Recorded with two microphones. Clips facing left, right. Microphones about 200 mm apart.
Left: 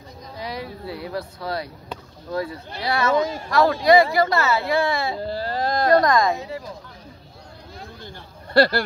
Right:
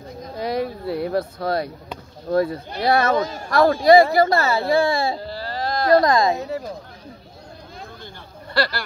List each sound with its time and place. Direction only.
0.2 s a sound: 50° right (ahead or behind)
2.2 s speech: 50° right (ahead or behind); by 5.2 s 30° right (ahead or behind)
5.2 s baby cry: 50° left (ahead or behind)
5.9 s a woman's voice: 25° right (ahead or behind)
8.5 s speech: 50° left (ahead or behind)